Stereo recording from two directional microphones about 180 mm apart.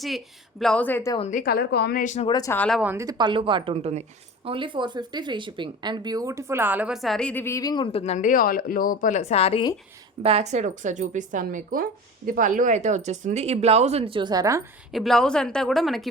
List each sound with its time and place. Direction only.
0.6 s speech: 5° left (ahead or behind)
1.3 s a woman's voice: 55° left (ahead or behind)
2.2 s speech: 25° left (ahead or behind)
2.5 s speech: 5° left (ahead or behind)
2.8 s a woman's voice: 15° right (ahead or behind); by 9.6 s 35° left (ahead or behind)
10.2 s a woman's voice: 35° right (ahead or behind); by 14.6 s 20° right (ahead or behind)
14.9 s speech: centre (ahead or behind)